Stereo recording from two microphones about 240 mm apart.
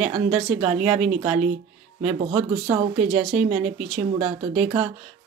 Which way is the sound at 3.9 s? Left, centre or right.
Right.